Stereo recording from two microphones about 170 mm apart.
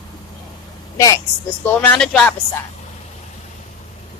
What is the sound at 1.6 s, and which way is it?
Speech, 10° left (ahead or behind).